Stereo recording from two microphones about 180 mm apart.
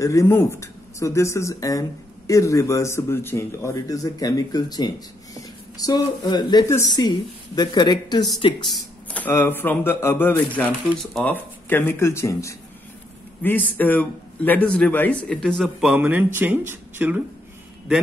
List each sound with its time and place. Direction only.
0.0 s speech: 15° left (ahead or behind)
9.1 s a man's voice: 10° left (ahead or behind); by 17.2 s 10° right (ahead or behind)